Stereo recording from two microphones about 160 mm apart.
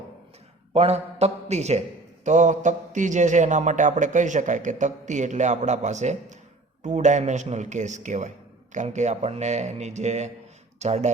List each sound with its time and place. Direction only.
0.7 s a man's voice: 40° right (ahead or behind)